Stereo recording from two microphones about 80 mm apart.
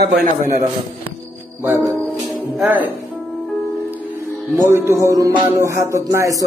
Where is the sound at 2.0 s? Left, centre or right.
Centre.